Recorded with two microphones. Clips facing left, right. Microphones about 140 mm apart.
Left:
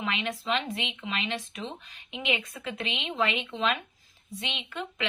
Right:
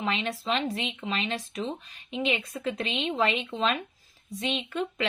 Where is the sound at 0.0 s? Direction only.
35° right (ahead or behind).